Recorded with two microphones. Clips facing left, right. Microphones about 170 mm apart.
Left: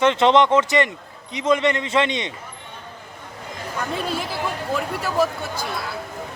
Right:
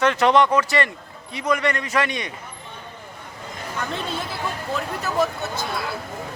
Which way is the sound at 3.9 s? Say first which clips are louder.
Left 3 dB; 5° left (ahead or behind).